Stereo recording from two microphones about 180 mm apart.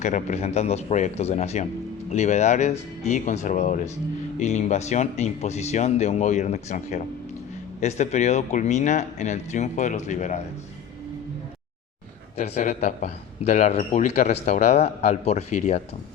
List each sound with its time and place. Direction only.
0.0 s speech: 40° left (ahead or behind)
12.4 s speech: 40° left (ahead or behind)